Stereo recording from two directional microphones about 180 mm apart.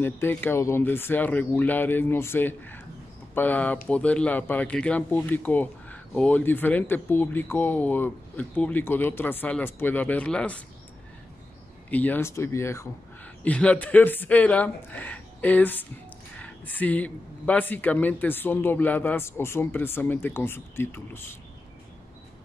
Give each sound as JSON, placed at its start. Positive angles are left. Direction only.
{"t": 0.0, "sound": "speech", "side_deg": 10}
{"t": 11.9, "sound": "speech", "side_deg": 10}